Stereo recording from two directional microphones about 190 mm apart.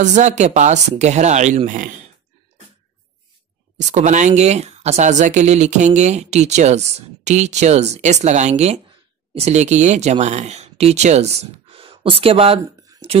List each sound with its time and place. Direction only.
0.0 s speech: 40° right (ahead or behind)
3.7 s speech: 40° right (ahead or behind)